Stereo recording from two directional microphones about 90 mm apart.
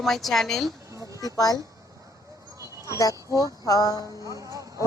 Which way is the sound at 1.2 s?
45° left (ahead or behind).